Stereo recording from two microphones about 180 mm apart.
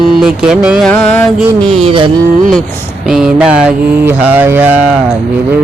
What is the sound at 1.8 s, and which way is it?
Music, 30° right (ahead or behind).